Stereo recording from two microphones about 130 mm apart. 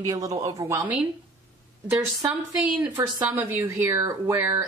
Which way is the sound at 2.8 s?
20° right (ahead or behind).